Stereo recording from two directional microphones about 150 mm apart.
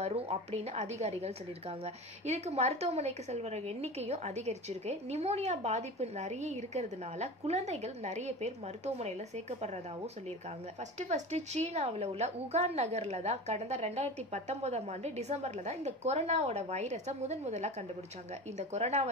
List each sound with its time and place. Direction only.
0.0 s a woman's voice: 45° right (ahead or behind)
11.0 s a woman's voice: 50° right (ahead or behind)